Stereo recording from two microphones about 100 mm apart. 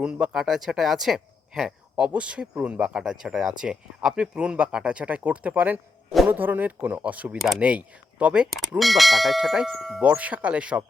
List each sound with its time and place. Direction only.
0.0 s speech: 10° right (ahead or behind)
10.0 s speech: 15° right (ahead or behind)